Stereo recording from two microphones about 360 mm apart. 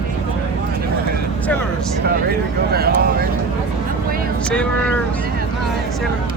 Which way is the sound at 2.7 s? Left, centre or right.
Right.